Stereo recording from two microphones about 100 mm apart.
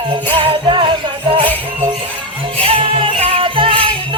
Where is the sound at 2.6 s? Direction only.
60° right (ahead or behind).